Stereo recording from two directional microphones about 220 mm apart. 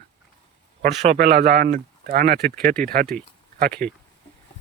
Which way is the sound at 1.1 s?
40° right (ahead or behind).